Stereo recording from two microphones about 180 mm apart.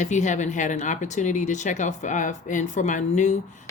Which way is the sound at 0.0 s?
40° left (ahead or behind).